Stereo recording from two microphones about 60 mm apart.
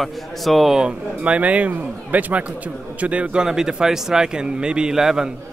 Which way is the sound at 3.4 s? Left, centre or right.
Centre.